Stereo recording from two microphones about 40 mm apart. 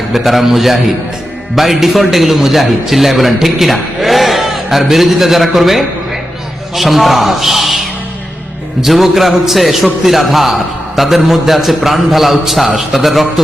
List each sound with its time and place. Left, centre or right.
0.1 s a man's voice: centre
8.8 s a man's voice: centre